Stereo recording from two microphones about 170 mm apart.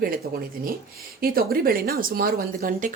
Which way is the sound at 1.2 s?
60° right (ahead or behind).